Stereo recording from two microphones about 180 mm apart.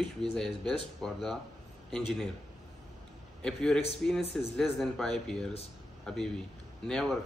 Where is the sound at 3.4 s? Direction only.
5° left (ahead or behind).